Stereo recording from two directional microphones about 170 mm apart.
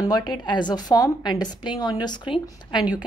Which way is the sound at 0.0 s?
25° left (ahead or behind).